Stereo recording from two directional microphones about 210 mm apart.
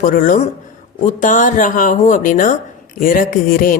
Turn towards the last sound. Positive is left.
turn(degrees=45)  # may be behind; listen again after turning